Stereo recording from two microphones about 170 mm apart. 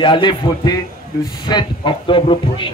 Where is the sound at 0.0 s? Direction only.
25° left (ahead or behind).